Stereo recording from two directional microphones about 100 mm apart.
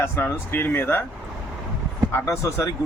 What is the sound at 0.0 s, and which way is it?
Speech, 25° left (ahead or behind).